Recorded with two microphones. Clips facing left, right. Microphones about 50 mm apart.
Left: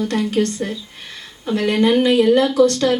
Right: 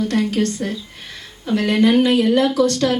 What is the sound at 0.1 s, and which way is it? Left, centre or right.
A woman's voice, left.